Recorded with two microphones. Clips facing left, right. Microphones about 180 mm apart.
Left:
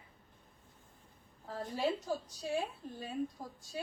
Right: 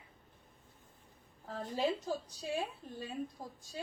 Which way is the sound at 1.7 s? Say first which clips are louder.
Even; 15° right (ahead or behind).